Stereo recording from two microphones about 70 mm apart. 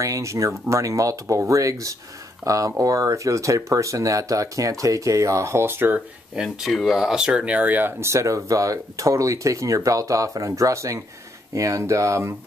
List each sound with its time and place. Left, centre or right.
0.0 s speech: right
6.3 s speech: centre; by 7.9 s right
8.0 s speech: right